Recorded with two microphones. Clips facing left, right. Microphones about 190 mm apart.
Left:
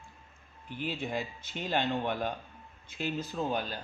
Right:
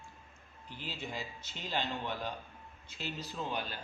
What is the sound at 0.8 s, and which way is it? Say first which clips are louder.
Speech: left 8 dB; 55° left (ahead or behind).